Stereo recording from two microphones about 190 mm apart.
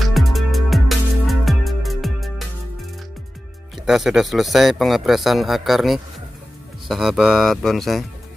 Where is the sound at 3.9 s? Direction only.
Centre (ahead or behind).